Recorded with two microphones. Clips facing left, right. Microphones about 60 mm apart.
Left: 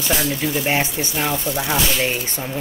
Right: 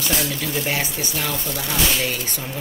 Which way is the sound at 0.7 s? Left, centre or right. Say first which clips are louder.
Left 4 dB; left.